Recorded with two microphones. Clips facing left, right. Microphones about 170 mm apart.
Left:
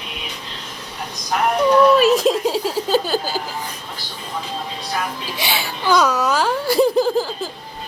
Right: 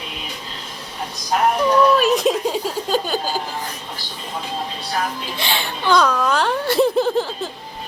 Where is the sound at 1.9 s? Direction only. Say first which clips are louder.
Left 2 dB; centre (ahead or behind).